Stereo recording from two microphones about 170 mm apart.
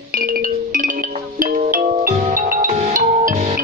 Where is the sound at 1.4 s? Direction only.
55° right (ahead or behind).